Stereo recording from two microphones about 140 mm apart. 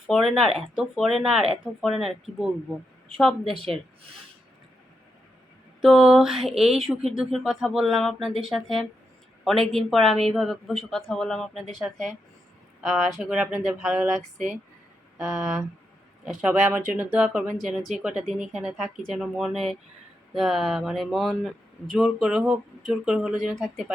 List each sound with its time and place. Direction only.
0.1 s speech: centre (ahead or behind)
5.8 s speech: centre (ahead or behind)
16.5 s speech: 15° right (ahead or behind)